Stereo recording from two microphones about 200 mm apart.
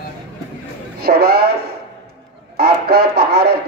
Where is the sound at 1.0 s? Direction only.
50° right (ahead or behind).